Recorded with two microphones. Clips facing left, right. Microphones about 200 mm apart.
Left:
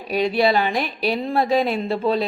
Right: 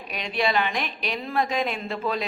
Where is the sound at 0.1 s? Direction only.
35° left (ahead or behind).